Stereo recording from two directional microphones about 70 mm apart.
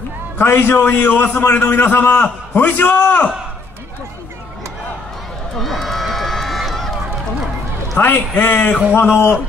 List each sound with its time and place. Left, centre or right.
0.4 s a man's voice: left
5.6 s run: centre
8.0 s a man's voice: left
8.5 s a man's voice: centre
9.0 s a man's voice: left